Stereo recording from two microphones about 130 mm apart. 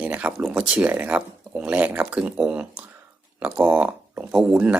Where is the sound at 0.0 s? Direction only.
10° right (ahead or behind).